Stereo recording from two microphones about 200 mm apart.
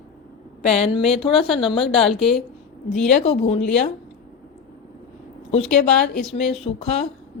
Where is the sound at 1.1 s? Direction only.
25° left (ahead or behind).